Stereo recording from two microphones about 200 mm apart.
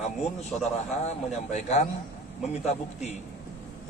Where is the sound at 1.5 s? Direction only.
35° left (ahead or behind).